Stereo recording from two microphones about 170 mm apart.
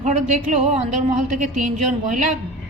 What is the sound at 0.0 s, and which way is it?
Speech, 45° right (ahead or behind).